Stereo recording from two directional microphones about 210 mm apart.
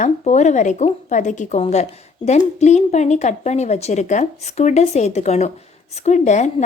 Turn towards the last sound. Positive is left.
turn(degrees=35)  # may be behind; listen again after turning